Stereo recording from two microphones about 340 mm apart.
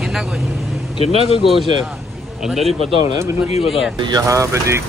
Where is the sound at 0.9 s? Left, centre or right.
Centre.